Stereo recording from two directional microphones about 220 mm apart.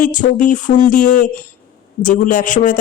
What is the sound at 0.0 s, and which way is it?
A woman's voice, 35° left (ahead or behind).